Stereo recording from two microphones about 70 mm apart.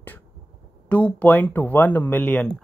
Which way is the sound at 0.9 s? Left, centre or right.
Centre.